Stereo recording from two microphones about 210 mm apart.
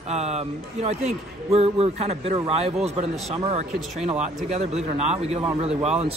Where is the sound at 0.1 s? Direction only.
30° right (ahead or behind).